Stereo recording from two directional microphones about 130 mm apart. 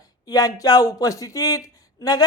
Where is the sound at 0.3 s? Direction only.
30° left (ahead or behind).